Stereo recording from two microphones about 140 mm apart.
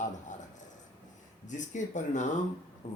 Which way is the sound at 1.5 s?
60° left (ahead or behind).